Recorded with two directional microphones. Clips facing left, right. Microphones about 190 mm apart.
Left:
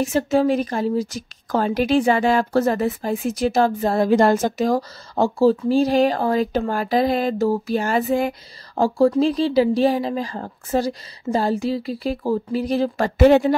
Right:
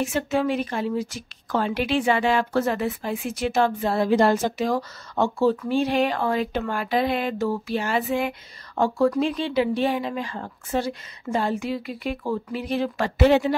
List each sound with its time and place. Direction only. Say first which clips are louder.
0.0 s a woman's voice: left 5 dB; 35° left (ahead or behind)